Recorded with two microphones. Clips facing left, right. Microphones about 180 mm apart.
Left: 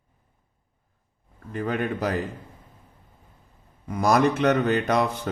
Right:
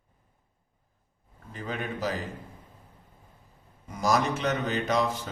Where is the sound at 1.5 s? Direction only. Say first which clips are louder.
Left 7 dB; 55° left (ahead or behind).